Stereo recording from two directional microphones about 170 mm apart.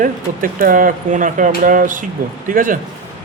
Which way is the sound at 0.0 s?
55° right (ahead or behind).